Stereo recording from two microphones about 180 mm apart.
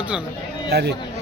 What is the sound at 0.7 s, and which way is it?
Speech, 65° right (ahead or behind).